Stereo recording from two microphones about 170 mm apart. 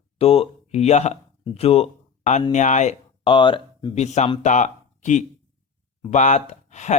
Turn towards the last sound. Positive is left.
turn(degrees=45)  # may be behind; listen again after turning